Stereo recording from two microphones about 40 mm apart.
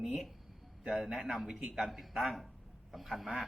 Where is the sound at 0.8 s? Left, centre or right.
Centre.